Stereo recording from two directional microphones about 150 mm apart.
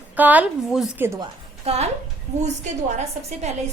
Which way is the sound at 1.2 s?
45° right (ahead or behind).